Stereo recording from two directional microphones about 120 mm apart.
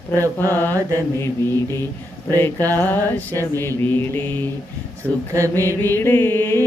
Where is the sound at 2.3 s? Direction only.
20° left (ahead or behind).